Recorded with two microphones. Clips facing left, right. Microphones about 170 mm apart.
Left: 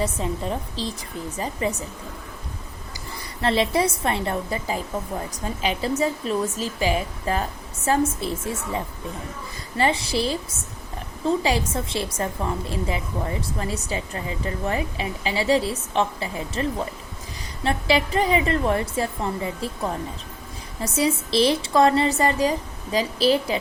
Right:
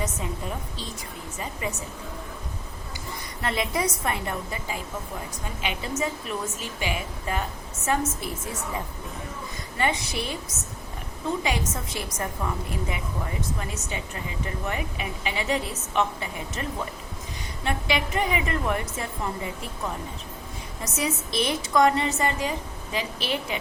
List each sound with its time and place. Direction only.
0.0 s a woman's voice: 30° left (ahead or behind)
3.4 s a woman's voice: 30° left (ahead or behind)
11.4 s a woman's voice: 30° left (ahead or behind)
20.8 s a woman's voice: 30° left (ahead or behind)